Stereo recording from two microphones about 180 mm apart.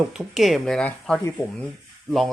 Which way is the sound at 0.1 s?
Centre (ahead or behind).